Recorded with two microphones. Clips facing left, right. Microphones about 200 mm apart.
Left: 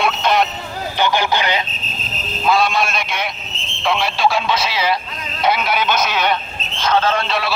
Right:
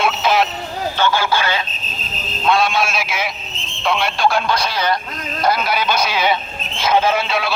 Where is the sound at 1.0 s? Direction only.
20° left (ahead or behind).